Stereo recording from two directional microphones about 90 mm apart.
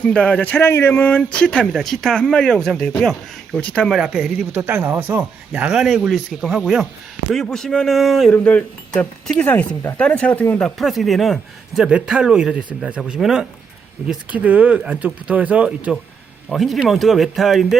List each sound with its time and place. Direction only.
0.0 s speech: 15° left (ahead or behind)
3.8 s speech: centre (ahead or behind)
4.6 s speech: 25° right (ahead or behind)
5.5 s speech: 10° right (ahead or behind)
8.3 s speech: 15° left (ahead or behind)
10.6 s a man's voice: centre (ahead or behind)
14.1 s a man's voice: 15° right (ahead or behind)
16.6 s speech: centre (ahead or behind)